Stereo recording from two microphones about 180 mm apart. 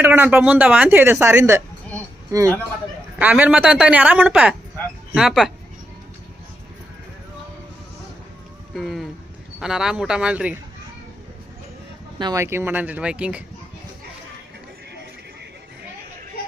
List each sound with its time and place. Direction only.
0.0 s a woman's voice: 10° right (ahead or behind)
8.7 s a sound: centre (ahead or behind)
9.6 s speech: 5° right (ahead or behind)
12.2 s a woman's voice: 15° right (ahead or behind)